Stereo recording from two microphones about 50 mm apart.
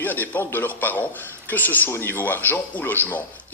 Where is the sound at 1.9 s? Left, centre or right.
Left.